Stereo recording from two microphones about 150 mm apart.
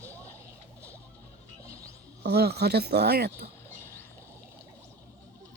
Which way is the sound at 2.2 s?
90° right.